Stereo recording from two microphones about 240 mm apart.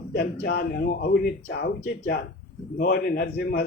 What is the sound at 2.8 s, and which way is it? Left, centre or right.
Speech, left.